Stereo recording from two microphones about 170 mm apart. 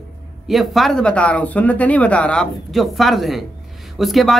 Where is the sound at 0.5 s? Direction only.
Centre (ahead or behind).